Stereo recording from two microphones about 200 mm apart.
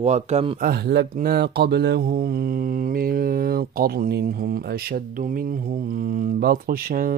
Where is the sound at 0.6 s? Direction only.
55° right (ahead or behind).